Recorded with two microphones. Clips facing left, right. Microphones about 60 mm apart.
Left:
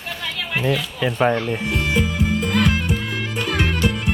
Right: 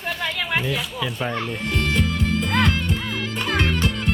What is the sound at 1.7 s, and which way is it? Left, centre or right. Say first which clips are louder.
Music: even; centre.